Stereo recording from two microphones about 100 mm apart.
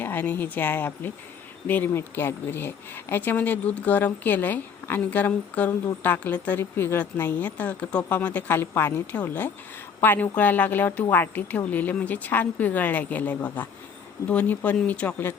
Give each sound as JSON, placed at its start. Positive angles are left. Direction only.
{"t": 0.0, "sound": "speech", "side_deg": 20}